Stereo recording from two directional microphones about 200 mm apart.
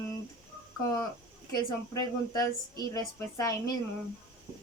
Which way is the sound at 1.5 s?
20° left (ahead or behind).